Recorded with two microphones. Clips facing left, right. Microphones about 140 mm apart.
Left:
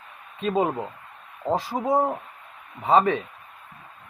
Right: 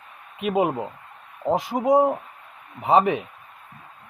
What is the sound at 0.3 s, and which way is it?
A man's voice, 15° right (ahead or behind).